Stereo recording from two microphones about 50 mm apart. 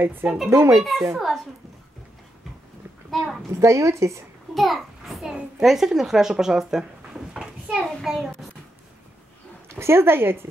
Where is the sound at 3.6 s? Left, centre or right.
Right.